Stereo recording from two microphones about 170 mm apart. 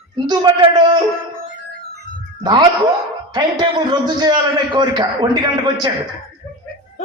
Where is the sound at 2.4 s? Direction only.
25° right (ahead or behind).